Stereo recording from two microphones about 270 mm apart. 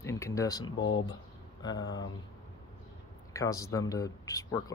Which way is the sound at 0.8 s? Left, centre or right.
Left.